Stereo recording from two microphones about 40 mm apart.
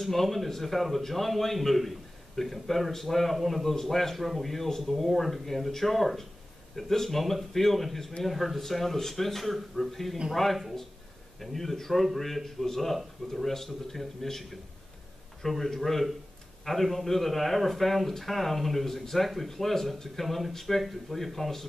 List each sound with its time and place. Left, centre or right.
0.0 s a man's voice: centre